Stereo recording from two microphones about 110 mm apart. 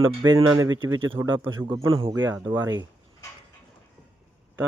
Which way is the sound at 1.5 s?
45° right (ahead or behind).